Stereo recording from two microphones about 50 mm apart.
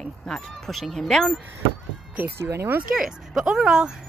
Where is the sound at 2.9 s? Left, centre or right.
Centre.